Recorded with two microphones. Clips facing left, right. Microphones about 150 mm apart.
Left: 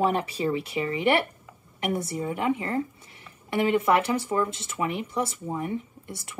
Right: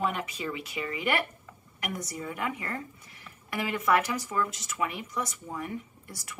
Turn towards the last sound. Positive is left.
turn(degrees=25)  # may be behind; listen again after turning